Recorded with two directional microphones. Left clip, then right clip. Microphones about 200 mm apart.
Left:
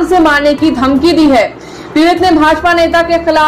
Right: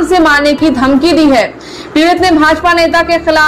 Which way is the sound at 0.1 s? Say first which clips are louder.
Right 1 dB; 20° right (ahead or behind).